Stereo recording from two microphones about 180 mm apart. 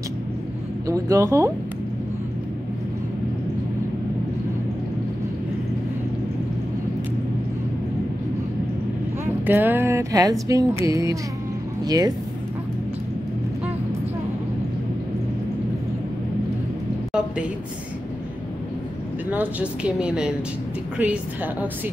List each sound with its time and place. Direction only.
0.8 s speech: 20° right (ahead or behind)
9.2 s speech: 10° right (ahead or behind)
19.3 s speech: 10° right (ahead or behind)